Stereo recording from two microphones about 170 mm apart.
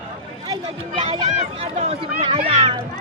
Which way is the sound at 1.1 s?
25° right (ahead or behind).